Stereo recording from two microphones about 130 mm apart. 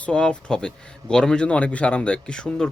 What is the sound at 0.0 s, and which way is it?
Speech, 5° left (ahead or behind).